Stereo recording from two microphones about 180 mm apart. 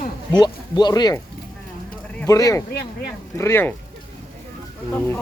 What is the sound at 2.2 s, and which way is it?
Speech, 20° left (ahead or behind).